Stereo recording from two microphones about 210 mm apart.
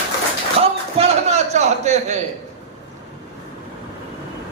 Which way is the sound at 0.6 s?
30° right (ahead or behind).